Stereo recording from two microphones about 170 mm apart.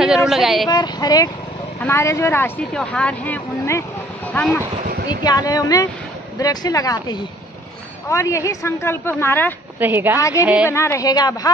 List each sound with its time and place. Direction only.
0.0 s speech: 5° right (ahead or behind)
0.7 s a woman's voice: 25° left (ahead or behind)
5.2 s a woman's voice: 25° left (ahead or behind)
9.8 s a woman's voice: 10° right (ahead or behind)
10.7 s a woman's voice: 15° left (ahead or behind)